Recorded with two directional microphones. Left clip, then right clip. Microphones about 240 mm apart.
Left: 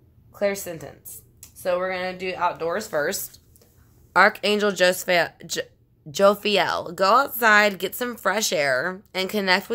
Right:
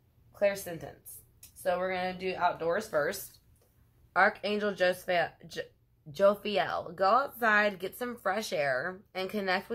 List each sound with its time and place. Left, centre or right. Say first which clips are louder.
0.3 s speech: left 4 dB; left
4.1 s speech: left 9 dB; left